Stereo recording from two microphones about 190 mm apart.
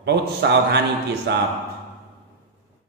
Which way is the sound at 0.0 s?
65° right (ahead or behind).